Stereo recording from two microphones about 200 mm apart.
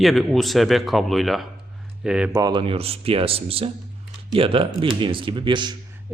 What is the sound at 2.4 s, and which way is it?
Speech, 25° right (ahead or behind).